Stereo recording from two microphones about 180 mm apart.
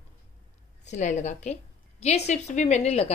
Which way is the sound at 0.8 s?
40° left (ahead or behind).